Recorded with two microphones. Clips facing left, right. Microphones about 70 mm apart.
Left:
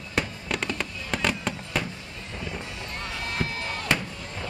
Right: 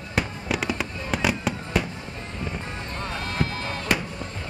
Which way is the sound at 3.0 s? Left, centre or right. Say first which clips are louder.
Right 3 dB; right.